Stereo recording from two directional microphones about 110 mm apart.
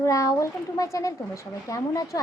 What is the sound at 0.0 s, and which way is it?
A child's voice, 30° left (ahead or behind).